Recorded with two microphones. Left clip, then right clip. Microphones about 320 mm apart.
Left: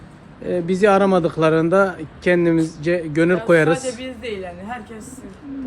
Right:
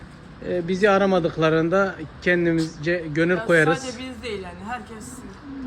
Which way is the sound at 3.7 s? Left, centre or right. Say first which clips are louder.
Left 5 dB; left.